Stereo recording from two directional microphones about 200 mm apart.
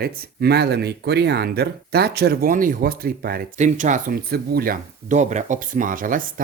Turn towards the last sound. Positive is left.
turn(degrees=-45)  # may be behind; listen again after turning